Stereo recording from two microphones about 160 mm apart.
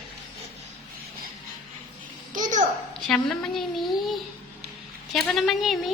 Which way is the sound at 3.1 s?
5° left (ahead or behind).